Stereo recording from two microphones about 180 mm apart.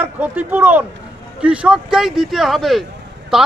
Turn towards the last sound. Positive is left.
turn(degrees=-5)  # may be behind; listen again after turning